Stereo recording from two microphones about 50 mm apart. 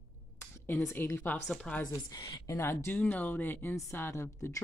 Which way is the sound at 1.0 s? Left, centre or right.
Left.